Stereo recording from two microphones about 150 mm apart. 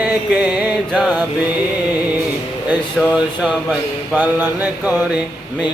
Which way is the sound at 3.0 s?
Centre (ahead or behind).